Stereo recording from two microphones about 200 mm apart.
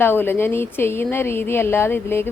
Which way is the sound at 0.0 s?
10° left (ahead or behind).